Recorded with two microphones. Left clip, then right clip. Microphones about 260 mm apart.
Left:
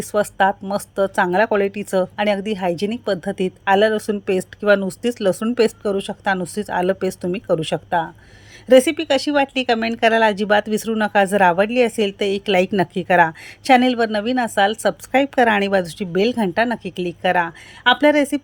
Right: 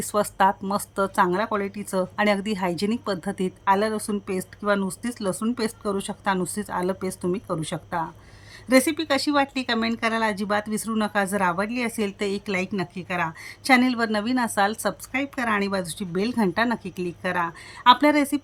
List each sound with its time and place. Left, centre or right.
0.0 s speech: centre